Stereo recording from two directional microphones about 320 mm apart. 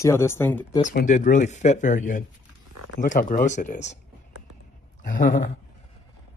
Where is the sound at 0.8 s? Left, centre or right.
Left.